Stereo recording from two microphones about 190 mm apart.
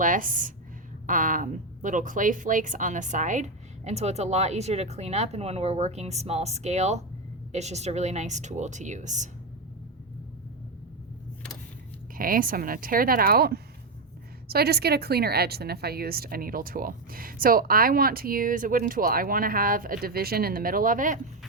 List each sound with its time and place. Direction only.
0.0 s a woman's voice: 45° right (ahead or behind)
12.1 s a woman's voice: 45° right (ahead or behind)